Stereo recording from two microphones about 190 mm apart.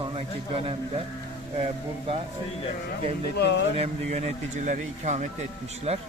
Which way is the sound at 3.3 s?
65° left (ahead or behind).